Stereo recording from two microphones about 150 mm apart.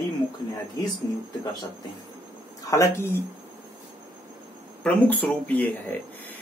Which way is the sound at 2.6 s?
20° left (ahead or behind).